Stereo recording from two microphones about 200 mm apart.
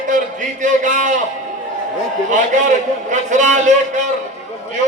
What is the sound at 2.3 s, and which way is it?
A man's voice, 40° right (ahead or behind).